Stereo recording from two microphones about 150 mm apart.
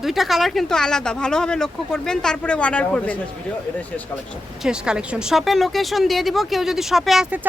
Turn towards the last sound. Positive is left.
turn(degrees=-10)  # may be behind; listen again after turning